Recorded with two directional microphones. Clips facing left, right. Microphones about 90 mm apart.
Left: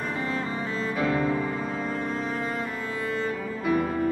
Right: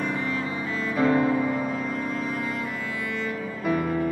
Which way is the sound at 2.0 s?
30° left (ahead or behind).